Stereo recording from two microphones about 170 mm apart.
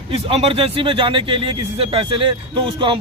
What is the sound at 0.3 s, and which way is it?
Speech, 35° right (ahead or behind).